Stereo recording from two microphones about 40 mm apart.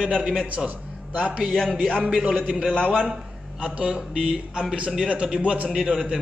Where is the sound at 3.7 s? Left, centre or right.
Right.